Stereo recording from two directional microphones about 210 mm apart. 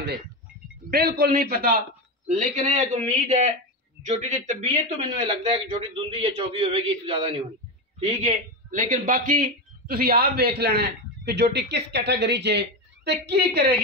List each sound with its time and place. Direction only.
0.8 s a man's voice: 45° right (ahead or behind)